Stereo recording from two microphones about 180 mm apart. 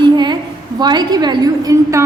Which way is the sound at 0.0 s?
25° right (ahead or behind).